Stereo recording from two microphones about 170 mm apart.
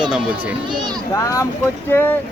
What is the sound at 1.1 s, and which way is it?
Speech, 20° left (ahead or behind).